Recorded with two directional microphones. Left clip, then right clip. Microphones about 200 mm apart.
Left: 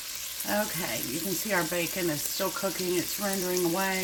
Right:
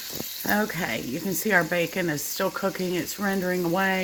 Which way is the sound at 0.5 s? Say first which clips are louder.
Right 4 dB; 40° right (ahead or behind).